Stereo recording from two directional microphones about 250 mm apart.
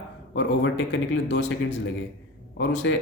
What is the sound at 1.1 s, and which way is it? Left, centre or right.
Speech, left.